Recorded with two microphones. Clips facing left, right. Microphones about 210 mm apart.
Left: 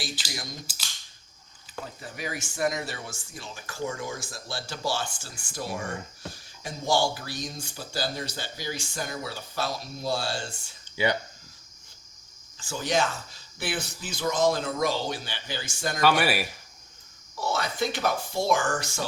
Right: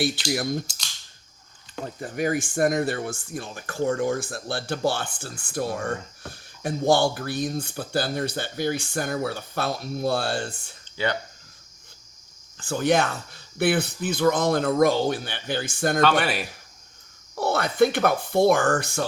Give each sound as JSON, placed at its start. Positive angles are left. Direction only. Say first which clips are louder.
{"t": 0.3, "sound": "speech", "louder": "right 13 dB", "side_deg": -60}
{"t": 2.0, "sound": "speech", "louder": "right 13 dB", "side_deg": -50}
{"t": 10.9, "sound": "speech", "louder": "even", "side_deg": 10}
{"t": 12.5, "sound": "speech", "louder": "right 5 dB", "side_deg": -55}
{"t": 16.0, "sound": "speech", "louder": "even", "side_deg": 10}
{"t": 17.3, "sound": "speech", "louder": "right 6 dB", "side_deg": -60}